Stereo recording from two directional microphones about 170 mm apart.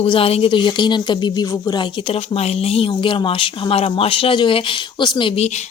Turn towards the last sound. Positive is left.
turn(degrees=35)  # may be behind; listen again after turning